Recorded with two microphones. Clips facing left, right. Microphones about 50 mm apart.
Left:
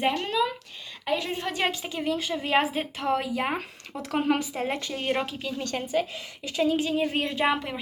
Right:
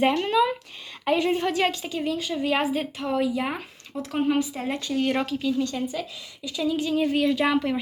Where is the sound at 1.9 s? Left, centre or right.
Left.